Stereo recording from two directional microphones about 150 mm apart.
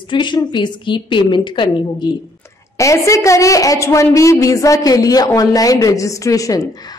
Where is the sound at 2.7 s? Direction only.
20° left (ahead or behind).